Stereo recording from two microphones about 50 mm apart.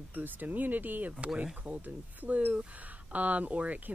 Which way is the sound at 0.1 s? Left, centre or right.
Right.